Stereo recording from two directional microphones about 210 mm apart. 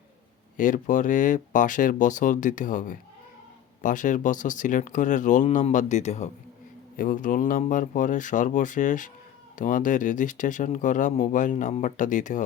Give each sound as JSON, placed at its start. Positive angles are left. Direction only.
{"t": 0.5, "sound": "speech", "side_deg": 40}